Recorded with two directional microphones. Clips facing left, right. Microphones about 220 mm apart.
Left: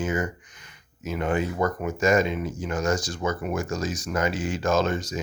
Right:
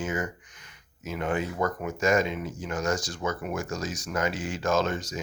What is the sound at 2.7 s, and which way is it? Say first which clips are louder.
Speech: left 3 dB; 30° left (ahead or behind).